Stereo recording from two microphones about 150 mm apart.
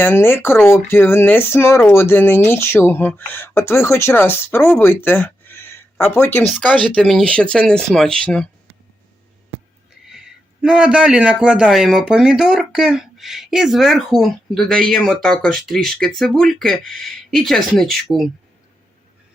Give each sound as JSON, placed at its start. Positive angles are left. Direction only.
{"t": 0.0, "sound": "a man's voice", "side_deg": 15}
{"t": 10.1, "sound": "a man's voice", "side_deg": -5}